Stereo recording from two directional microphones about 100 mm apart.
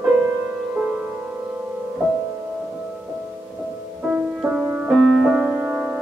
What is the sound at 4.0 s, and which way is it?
Music, 10° right (ahead or behind).